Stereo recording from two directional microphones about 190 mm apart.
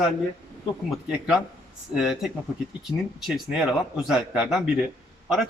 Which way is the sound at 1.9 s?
Centre (ahead or behind).